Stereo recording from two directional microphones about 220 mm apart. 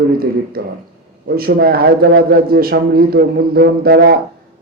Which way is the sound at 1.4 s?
45° right (ahead or behind).